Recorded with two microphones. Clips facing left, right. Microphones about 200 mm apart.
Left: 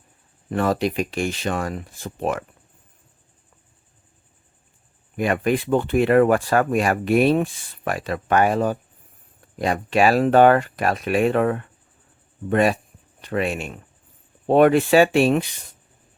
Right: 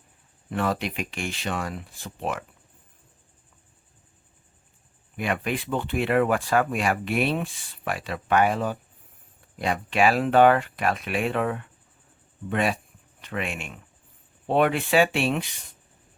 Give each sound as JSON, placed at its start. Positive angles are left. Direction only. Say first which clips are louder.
{"t": 0.5, "sound": "speech", "louder": "left 6 dB", "side_deg": 40}
{"t": 5.1, "sound": "speech", "louder": "left 7 dB", "side_deg": 45}